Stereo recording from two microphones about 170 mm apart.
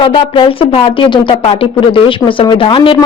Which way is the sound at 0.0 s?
30° left (ahead or behind).